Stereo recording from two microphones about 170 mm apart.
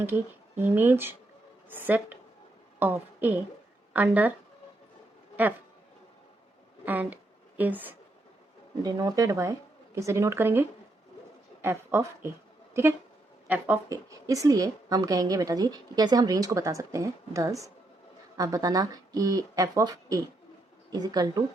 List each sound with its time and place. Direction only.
0.0 s a woman's voice: 10° right (ahead or behind)
6.8 s speech: 10° right (ahead or behind)
8.8 s speech: 20° right (ahead or behind)
13.9 s a woman's voice: 20° right (ahead or behind)